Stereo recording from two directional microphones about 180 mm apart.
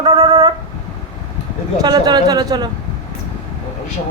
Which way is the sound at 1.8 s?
20° right (ahead or behind).